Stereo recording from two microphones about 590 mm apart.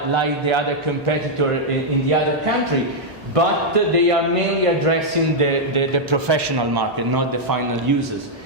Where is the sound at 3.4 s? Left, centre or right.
Right.